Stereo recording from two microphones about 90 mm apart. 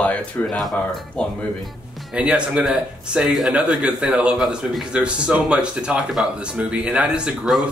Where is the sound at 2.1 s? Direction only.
10° right (ahead or behind).